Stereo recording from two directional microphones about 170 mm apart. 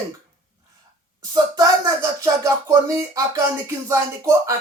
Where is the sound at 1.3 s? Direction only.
20° right (ahead or behind).